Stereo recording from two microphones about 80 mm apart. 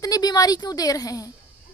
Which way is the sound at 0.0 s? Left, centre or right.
Left.